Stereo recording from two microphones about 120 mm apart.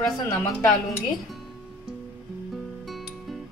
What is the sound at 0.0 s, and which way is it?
Speech, 25° left (ahead or behind).